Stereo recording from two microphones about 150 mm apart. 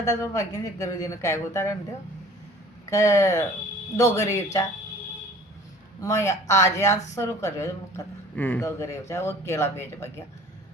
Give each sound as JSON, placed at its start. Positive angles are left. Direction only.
{"t": 0.0, "sound": "speech", "side_deg": 20}
{"t": 2.9, "sound": "speech", "side_deg": 20}
{"t": 6.0, "sound": "speech", "side_deg": 20}